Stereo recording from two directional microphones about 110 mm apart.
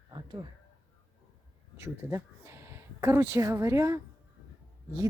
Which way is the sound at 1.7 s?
25° right (ahead or behind).